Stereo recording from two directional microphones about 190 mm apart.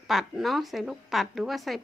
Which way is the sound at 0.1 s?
Centre (ahead or behind).